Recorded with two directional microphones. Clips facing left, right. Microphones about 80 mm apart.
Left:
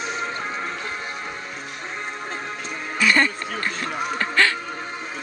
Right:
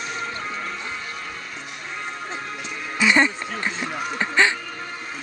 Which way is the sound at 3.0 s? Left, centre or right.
Centre.